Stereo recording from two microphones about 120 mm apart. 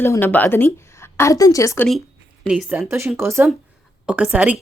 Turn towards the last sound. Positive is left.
turn(degrees=-10)  # may be behind; listen again after turning